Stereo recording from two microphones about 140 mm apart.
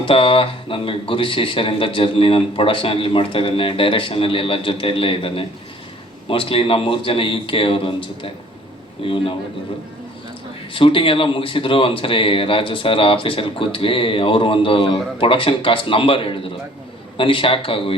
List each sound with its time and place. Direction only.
0.0 s speech: 40° left (ahead or behind)
10.8 s speech: 40° left (ahead or behind)